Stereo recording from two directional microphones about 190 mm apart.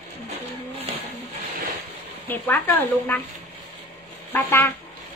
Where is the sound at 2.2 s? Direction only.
10° left (ahead or behind).